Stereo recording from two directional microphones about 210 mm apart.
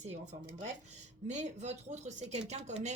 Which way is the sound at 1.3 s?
35° right (ahead or behind).